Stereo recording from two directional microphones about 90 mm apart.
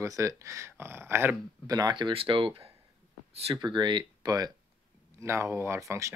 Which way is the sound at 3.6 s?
60° right (ahead or behind).